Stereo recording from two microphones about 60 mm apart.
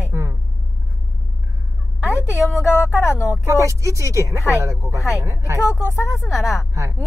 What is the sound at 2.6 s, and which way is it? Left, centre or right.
Speech, left.